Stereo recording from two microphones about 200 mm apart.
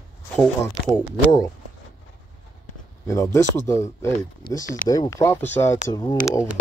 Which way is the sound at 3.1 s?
15° left (ahead or behind).